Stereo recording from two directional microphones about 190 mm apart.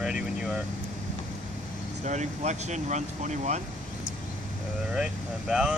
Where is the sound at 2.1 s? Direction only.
40° right (ahead or behind).